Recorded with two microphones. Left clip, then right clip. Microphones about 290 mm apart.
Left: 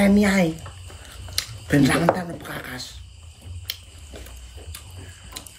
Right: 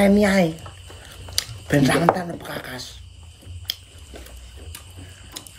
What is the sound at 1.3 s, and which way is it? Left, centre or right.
Speech, centre.